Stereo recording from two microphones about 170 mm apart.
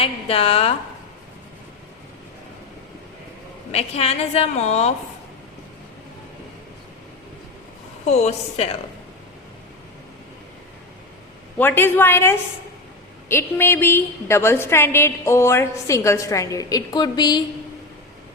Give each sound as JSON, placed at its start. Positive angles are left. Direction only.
{"t": 0.0, "sound": "a woman's voice", "side_deg": 35}
{"t": 3.7, "sound": "a woman's voice", "side_deg": 35}
{"t": 8.0, "sound": "a woman's voice", "side_deg": 40}
{"t": 11.5, "sound": "a woman's voice", "side_deg": 10}